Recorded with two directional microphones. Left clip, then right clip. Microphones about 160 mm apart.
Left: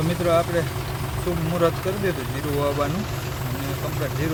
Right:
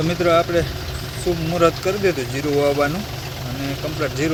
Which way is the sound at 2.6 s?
10° right (ahead or behind).